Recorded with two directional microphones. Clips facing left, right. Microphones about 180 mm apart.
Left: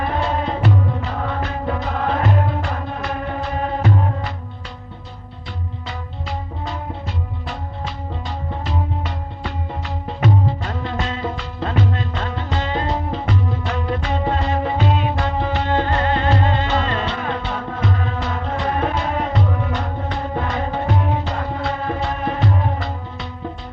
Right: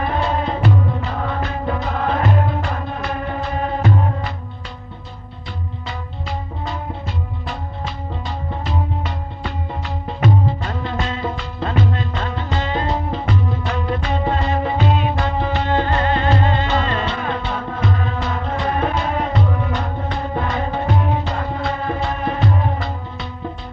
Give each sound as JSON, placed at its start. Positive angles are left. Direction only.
{"t": 0.0, "sound": "music", "side_deg": 35}
{"t": 5.9, "sound": "music", "side_deg": 40}